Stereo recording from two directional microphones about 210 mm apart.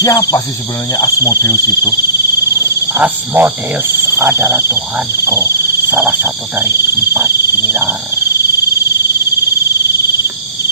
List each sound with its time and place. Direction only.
0.0 s speech: 15° left (ahead or behind)
2.9 s speech: 10° right (ahead or behind)